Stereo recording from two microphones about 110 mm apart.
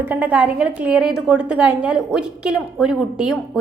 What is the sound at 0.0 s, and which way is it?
A woman's voice, 15° right (ahead or behind).